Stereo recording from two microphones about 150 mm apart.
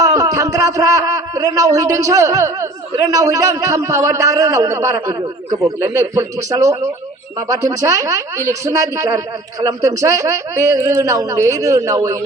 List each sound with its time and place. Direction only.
0.0 s a man's voice: 20° right (ahead or behind)